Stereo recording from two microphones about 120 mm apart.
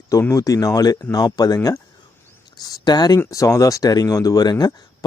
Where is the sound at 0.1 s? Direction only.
25° left (ahead or behind).